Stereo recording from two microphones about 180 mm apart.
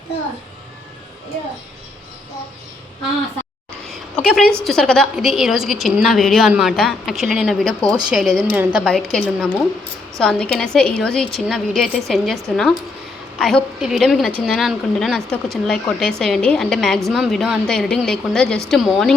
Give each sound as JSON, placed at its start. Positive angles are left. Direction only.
{"t": 3.9, "sound": "a woman's voice", "side_deg": 5}